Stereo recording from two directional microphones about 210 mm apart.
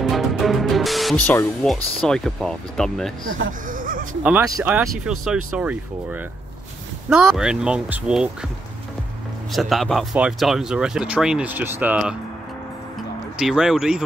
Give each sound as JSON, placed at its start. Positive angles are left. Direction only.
{"t": 0.0, "sound": "music", "side_deg": 0}
{"t": 2.0, "sound": "speech", "side_deg": 5}
{"t": 3.6, "sound": "a sound", "side_deg": -40}
{"t": 4.2, "sound": "speech", "side_deg": -10}
{"t": 7.1, "sound": "speech", "side_deg": -5}
{"t": 9.5, "sound": "speech", "side_deg": 0}
{"t": 13.4, "sound": "speech", "side_deg": 0}